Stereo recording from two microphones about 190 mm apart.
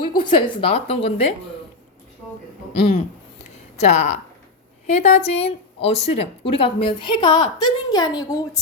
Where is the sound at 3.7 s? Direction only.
35° left (ahead or behind).